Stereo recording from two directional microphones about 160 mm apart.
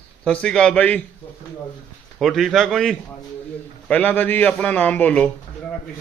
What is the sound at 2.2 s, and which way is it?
A man's voice, centre (ahead or behind).